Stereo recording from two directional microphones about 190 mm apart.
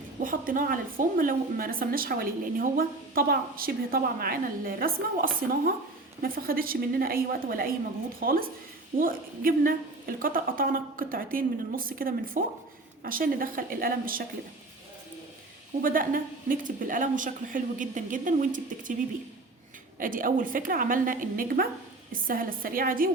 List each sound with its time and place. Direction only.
0.2 s speech: 45° right (ahead or behind)
15.8 s speech: 45° right (ahead or behind)
20.0 s speech: 45° right (ahead or behind)